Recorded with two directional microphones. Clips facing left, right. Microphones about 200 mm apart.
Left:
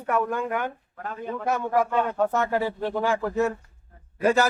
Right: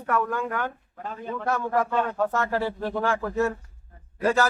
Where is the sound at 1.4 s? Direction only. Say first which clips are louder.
Left 1 dB; 20° left (ahead or behind).